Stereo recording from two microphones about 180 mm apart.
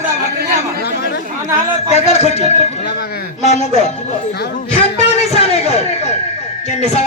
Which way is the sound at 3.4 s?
40° left (ahead or behind).